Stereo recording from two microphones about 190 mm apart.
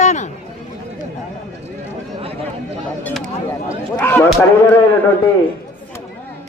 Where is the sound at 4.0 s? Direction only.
10° left (ahead or behind).